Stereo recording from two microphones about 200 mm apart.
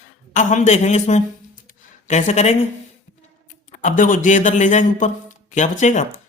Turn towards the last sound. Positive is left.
turn(degrees=35)  # may be behind; listen again after turning